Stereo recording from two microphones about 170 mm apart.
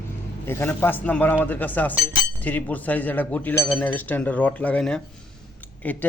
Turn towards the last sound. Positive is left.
turn(degrees=10)  # may be behind; listen again after turning